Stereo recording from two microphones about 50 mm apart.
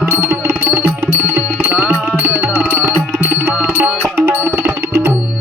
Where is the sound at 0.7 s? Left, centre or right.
Right.